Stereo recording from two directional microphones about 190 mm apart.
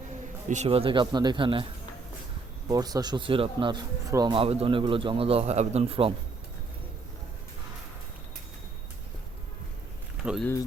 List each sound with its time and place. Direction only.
0.5 s speech: 35° right (ahead or behind)
2.6 s speech: 20° right (ahead or behind)